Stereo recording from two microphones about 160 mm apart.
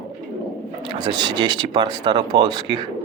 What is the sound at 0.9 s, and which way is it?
Speech, 25° right (ahead or behind).